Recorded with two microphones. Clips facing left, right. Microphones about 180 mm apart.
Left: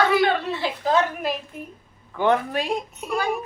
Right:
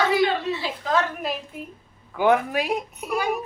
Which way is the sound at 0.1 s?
55° left (ahead or behind).